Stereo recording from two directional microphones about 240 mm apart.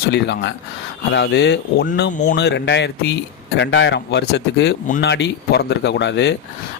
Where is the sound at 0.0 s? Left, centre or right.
Left.